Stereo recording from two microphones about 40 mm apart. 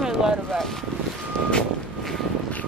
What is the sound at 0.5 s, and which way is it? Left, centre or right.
Speech, centre.